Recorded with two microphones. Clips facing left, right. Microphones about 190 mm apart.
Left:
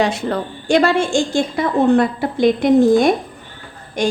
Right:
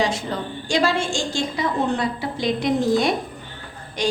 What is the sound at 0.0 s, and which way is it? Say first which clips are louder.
A woman's voice: left 5 dB; 60° left (ahead or behind).